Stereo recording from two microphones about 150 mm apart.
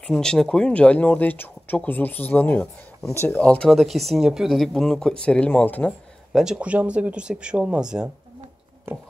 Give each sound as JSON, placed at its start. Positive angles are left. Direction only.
{"t": 0.0, "sound": "speech", "side_deg": 5}
{"t": 6.3, "sound": "speech", "side_deg": -5}
{"t": 8.9, "sound": "speech", "side_deg": -15}